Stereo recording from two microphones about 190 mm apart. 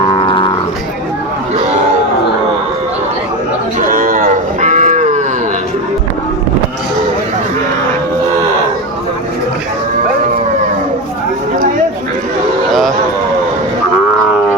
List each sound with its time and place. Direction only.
0.0 s livestock: 25° left (ahead or behind)
3.8 s cattle: 45° right (ahead or behind)